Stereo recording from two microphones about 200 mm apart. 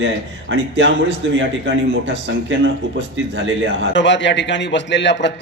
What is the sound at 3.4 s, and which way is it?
Speech, 70° right (ahead or behind).